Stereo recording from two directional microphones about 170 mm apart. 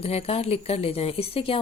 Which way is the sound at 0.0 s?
35° left (ahead or behind).